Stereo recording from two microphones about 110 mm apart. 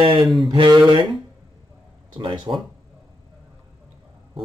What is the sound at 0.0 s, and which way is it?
Speech, 50° right (ahead or behind).